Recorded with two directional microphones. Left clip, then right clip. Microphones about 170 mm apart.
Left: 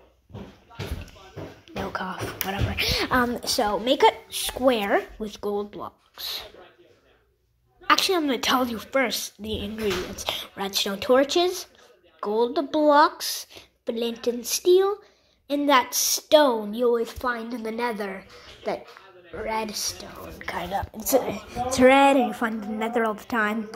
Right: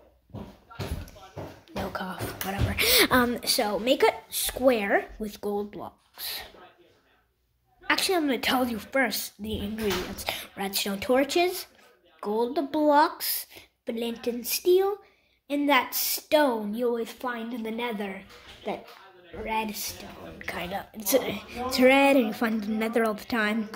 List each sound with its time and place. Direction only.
1.8 s a sound: centre (ahead or behind)
2.9 s a woman's voice: 50° right (ahead or behind)
3.3 s a woman's voice: 5° left (ahead or behind)
3.6 s a woman's voice: 10° right (ahead or behind)
7.8 s a woman's voice: 10° right (ahead or behind)
22.2 s a woman's voice: 20° right (ahead or behind)
22.6 s a woman's voice: 35° right (ahead or behind)
23.2 s a woman's voice: 15° right (ahead or behind)